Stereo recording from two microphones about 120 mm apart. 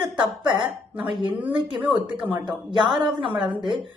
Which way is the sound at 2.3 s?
40° right (ahead or behind).